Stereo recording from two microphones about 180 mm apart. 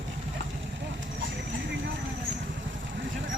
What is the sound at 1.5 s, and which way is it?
Vehicle, 85° right.